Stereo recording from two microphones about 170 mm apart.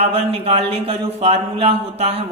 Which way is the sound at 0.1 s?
35° right (ahead or behind).